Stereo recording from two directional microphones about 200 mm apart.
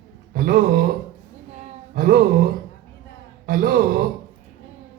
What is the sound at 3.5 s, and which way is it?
Music, 45° right (ahead or behind).